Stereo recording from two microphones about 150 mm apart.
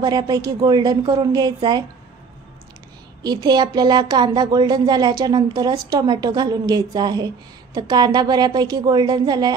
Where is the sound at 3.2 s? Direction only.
25° right (ahead or behind).